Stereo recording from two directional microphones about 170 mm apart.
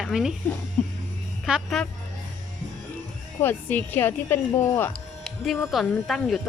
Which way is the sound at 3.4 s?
10° left (ahead or behind).